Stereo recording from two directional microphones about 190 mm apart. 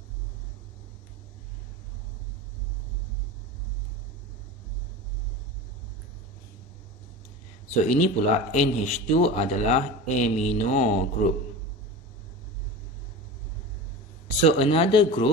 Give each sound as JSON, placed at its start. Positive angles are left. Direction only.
{"t": 7.8, "sound": "speech", "side_deg": 40}
{"t": 14.4, "sound": "speech", "side_deg": 30}